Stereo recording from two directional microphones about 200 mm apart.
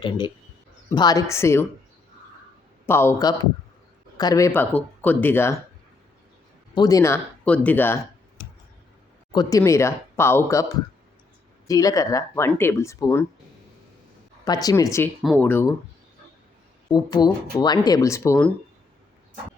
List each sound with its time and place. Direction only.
0.0 s speech: 25° left (ahead or behind)
2.8 s speech: 10° left (ahead or behind)
6.7 s speech: 20° left (ahead or behind)
9.3 s speech: 20° left (ahead or behind)
11.7 s speech: 15° left (ahead or behind)
14.4 s speech: 20° left (ahead or behind)
15.2 s speech: centre (ahead or behind)
15.4 s speech: 10° left (ahead or behind)
16.9 s speech: 20° left (ahead or behind)